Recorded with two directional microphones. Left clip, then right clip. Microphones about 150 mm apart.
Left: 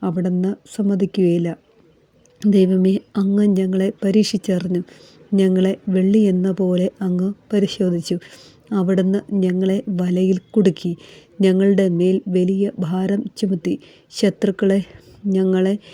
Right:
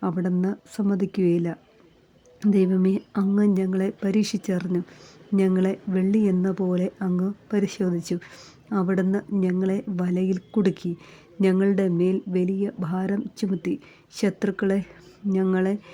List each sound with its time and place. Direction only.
0.0 s a woman's voice: 15° left (ahead or behind)